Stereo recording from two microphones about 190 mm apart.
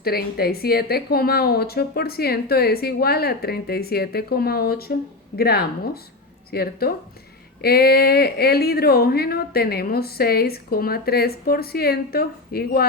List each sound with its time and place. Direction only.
0.0 s speech: 55° left (ahead or behind)